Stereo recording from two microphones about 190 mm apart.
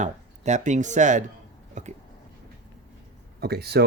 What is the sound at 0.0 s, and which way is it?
Speech, 40° right (ahead or behind).